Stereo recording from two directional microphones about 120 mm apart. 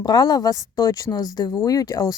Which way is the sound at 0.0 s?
35° left (ahead or behind).